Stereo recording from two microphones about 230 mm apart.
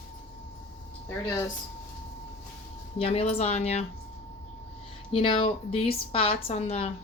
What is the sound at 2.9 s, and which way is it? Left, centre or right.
Speech, left.